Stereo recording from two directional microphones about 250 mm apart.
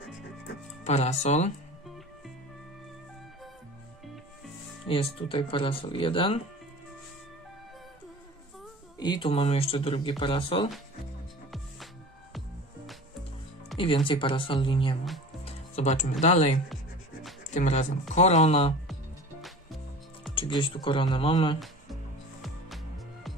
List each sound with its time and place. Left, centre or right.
0.8 s speech: left
4.8 s speech: left
9.0 s speech: centre
13.7 s speech: left
20.3 s speech: centre